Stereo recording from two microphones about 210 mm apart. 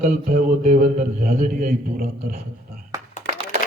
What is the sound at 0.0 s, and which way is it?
A man's voice, 35° right (ahead or behind).